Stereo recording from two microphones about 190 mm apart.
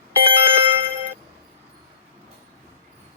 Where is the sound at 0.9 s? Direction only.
15° right (ahead or behind).